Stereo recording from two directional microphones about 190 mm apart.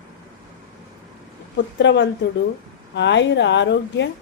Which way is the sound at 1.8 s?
70° left (ahead or behind).